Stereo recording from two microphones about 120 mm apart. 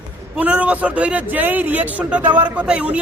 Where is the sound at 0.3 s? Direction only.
10° right (ahead or behind).